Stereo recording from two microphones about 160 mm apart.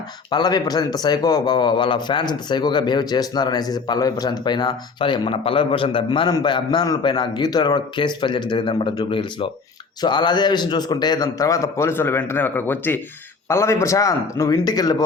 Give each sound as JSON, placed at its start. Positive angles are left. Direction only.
{"t": 0.3, "sound": "speech", "side_deg": 25}